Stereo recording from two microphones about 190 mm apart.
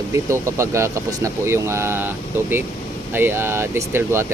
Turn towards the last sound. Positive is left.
turn(degrees=-15)  # may be behind; listen again after turning